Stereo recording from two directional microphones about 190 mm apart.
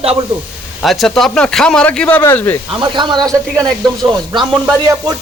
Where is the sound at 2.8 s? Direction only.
25° right (ahead or behind).